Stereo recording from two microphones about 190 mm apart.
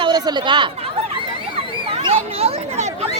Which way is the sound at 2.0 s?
30° right (ahead or behind).